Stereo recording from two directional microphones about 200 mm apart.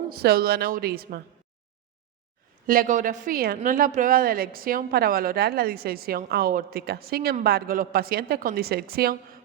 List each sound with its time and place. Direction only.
0.1 s a woman's voice: 50° right (ahead or behind)
2.6 s a woman's voice: 40° right (ahead or behind)